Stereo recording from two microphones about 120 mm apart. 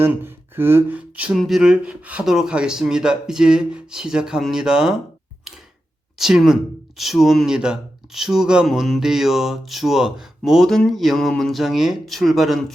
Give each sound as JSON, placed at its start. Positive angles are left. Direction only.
{"t": 0.0, "sound": "speech", "side_deg": -20}
{"t": 5.5, "sound": "a sound", "side_deg": -5}
{"t": 6.1, "sound": "speech", "side_deg": -5}